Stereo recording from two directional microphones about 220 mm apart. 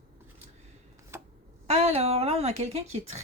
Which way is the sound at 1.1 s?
10° right (ahead or behind).